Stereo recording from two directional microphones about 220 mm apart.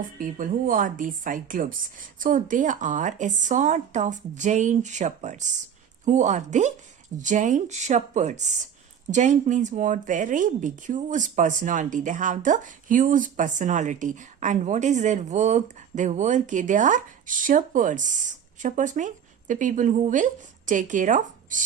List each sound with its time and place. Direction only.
0.0 s speech: 40° right (ahead or behind)